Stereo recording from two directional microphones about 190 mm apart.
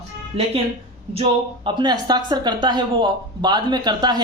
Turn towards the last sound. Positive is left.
turn(degrees=-20)  # may be behind; listen again after turning